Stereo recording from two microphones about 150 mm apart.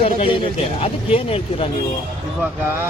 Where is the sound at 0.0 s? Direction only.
40° left (ahead or behind).